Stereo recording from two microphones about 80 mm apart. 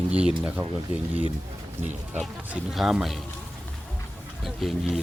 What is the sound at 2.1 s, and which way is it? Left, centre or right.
Speech, centre.